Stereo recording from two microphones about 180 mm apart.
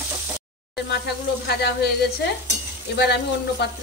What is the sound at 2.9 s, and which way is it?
Speech, 65° left (ahead or behind).